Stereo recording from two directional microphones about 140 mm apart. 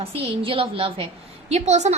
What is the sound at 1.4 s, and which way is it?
Speech, 50° right (ahead or behind).